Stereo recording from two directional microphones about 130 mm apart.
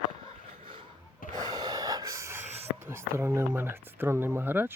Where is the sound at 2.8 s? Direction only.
20° right (ahead or behind).